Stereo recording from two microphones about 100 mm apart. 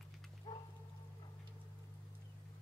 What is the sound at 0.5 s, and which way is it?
Dog, 50° left (ahead or behind).